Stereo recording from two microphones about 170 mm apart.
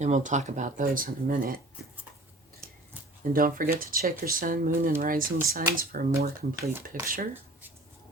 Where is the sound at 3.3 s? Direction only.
55° right (ahead or behind).